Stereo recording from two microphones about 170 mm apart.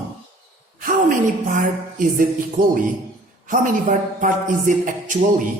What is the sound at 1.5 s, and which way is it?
Speech, 50° right (ahead or behind).